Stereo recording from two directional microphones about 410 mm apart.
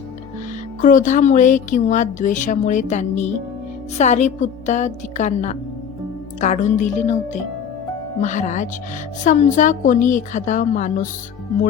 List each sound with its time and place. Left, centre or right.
0.8 s speech: centre
8.2 s a woman's voice: centre